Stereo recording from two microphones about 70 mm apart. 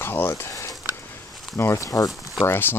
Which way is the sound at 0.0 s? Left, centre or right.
Left.